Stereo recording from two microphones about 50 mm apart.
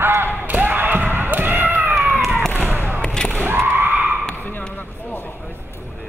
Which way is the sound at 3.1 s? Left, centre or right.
Centre.